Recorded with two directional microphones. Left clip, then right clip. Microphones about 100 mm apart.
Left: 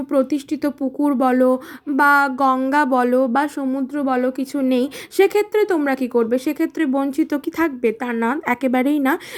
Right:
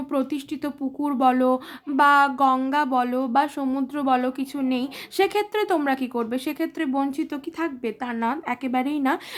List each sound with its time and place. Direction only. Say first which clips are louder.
0.1 s speech: left 8 dB; 25° left (ahead or behind)
2.6 s speech: left 6 dB; 40° left (ahead or behind)
3.6 s a woman's voice: left 3 dB; 5° left (ahead or behind)
4.0 s speech: left 2 dB; 15° left (ahead or behind)
5.9 s speech: left 7 dB; 30° left (ahead or behind)
7.3 s speech: left 8 dB; 60° left (ahead or behind)
7.8 s speech: left 7 dB; 40° left (ahead or behind)
9.0 s speech: left 4 dB; 35° left (ahead or behind)